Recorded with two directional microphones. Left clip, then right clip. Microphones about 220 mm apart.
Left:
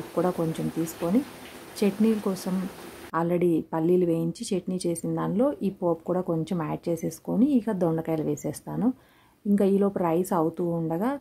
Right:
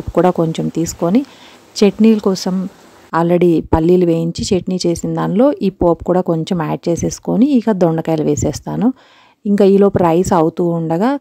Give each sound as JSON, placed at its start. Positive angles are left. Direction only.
{"t": 0.1, "sound": "a woman's voice", "side_deg": -40}